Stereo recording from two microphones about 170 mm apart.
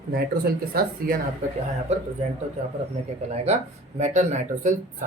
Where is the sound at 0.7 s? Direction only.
60° right (ahead or behind).